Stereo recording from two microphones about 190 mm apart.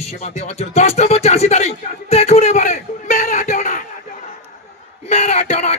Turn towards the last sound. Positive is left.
turn(degrees=35)  # may be behind; listen again after turning